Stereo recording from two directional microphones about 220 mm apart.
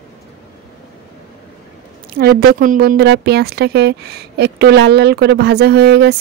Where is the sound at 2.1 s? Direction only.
45° right (ahead or behind).